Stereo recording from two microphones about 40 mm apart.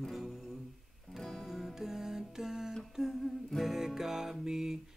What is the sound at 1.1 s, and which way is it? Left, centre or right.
Music, left.